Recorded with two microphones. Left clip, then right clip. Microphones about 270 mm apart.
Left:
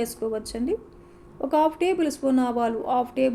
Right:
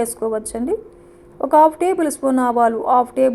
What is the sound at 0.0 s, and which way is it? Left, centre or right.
Speech, centre.